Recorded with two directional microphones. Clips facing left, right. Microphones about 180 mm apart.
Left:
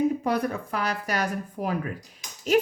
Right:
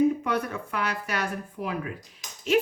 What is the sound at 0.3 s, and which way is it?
Speech, 35° left (ahead or behind).